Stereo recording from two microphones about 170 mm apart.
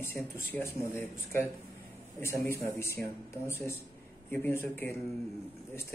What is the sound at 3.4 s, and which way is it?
Speech, 15° left (ahead or behind).